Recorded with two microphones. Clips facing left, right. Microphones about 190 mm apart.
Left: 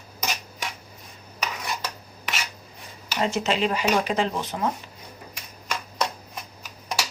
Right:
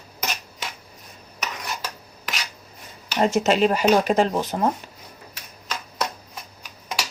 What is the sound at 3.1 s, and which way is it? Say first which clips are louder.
Speech: right 5 dB; 45° right (ahead or behind).